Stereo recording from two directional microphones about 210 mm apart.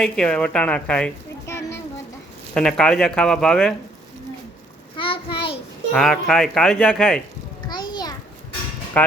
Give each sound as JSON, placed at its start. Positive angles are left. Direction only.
{"t": 0.0, "sound": "a woman's voice", "side_deg": 5}
{"t": 4.9, "sound": "child singing", "side_deg": 25}
{"t": 5.9, "sound": "speech", "side_deg": 0}
{"t": 7.7, "sound": "a sound", "side_deg": 20}
{"t": 8.9, "sound": "speech", "side_deg": 5}